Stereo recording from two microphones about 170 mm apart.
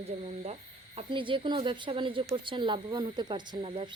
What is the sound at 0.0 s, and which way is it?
Speech, 40° right (ahead or behind).